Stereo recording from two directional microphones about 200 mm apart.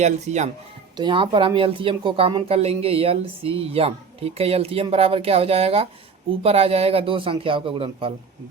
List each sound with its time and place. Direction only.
0.0 s speech: 35° right (ahead or behind)
0.9 s speech: 25° right (ahead or behind)